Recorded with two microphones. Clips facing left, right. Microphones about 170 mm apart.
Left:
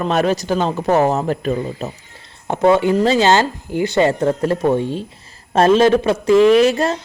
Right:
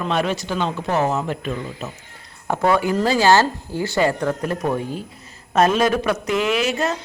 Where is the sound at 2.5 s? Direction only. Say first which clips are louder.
Left 5 dB; 20° left (ahead or behind); by 6.9 s 35° left (ahead or behind).